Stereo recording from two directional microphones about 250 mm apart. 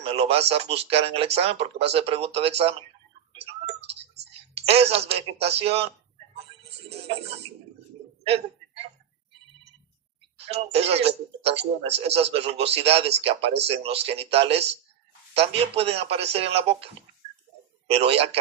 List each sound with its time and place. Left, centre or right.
0.0 s speech: right
3.8 s clicking: right
4.7 s speech: right
6.7 s music: right
10.3 s speech: right
17.9 s speech: right